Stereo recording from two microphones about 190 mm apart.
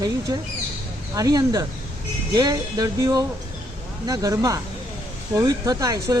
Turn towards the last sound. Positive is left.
turn(degrees=-20)  # may be behind; listen again after turning